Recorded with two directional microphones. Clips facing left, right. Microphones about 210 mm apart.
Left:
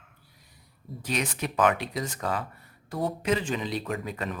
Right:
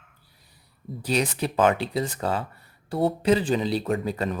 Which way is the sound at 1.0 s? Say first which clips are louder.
Right 5 dB; 35° right (ahead or behind).